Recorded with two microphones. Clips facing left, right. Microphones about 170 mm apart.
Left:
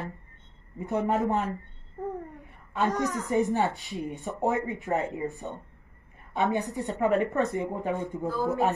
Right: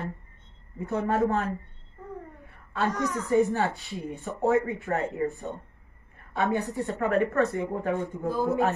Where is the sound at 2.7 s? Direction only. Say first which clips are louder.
Left 1 dB; 20° left (ahead or behind).